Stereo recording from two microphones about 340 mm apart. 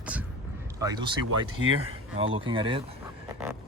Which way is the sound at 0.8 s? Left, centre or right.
Centre.